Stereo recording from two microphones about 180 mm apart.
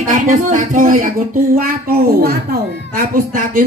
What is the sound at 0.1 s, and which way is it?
Speech, 45° right (ahead or behind).